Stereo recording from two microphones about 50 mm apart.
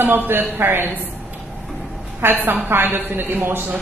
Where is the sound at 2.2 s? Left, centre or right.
Right.